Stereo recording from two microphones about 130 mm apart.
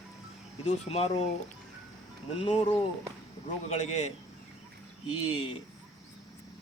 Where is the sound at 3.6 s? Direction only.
60° left (ahead or behind).